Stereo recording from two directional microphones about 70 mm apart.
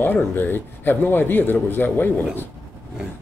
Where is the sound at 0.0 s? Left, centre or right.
Left.